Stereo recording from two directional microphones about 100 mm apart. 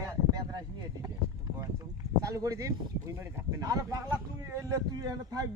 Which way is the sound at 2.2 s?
35° right (ahead or behind).